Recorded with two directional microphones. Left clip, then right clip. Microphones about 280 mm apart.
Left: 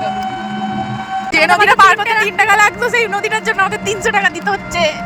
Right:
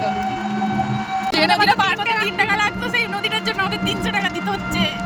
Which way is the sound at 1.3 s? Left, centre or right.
Centre.